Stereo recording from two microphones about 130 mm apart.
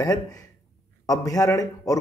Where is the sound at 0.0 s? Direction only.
30° left (ahead or behind).